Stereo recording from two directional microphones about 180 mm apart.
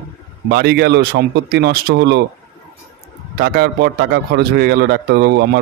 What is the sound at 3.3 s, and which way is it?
Speech, 60° right (ahead or behind).